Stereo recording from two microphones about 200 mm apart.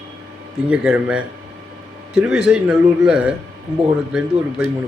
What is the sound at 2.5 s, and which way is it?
A man's voice, 5° right (ahead or behind).